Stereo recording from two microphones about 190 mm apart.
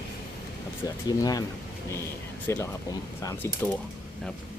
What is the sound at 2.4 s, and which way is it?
Speech, 15° left (ahead or behind).